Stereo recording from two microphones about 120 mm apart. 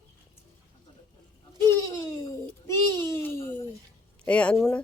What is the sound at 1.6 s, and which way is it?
A child's voice, 25° left (ahead or behind).